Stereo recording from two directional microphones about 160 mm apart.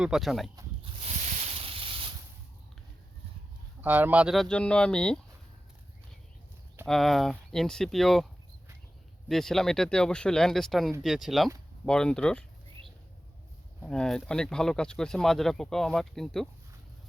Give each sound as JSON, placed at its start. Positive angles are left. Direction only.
{"t": 0.0, "sound": "speech", "side_deg": 0}
{"t": 0.8, "sound": "a sound", "side_deg": -35}
{"t": 1.2, "sound": "a sound", "side_deg": -45}
{"t": 3.8, "sound": "speech", "side_deg": -10}
{"t": 6.8, "sound": "speech", "side_deg": 0}
{"t": 9.3, "sound": "speech", "side_deg": 0}
{"t": 13.8, "sound": "speech", "side_deg": 5}